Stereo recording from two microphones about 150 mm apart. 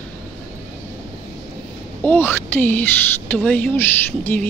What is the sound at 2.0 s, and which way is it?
Speech, 15° left (ahead or behind).